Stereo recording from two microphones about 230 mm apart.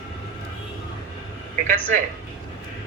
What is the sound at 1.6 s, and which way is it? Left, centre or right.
Speech, right.